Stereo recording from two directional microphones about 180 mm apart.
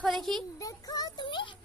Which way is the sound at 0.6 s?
20° left (ahead or behind).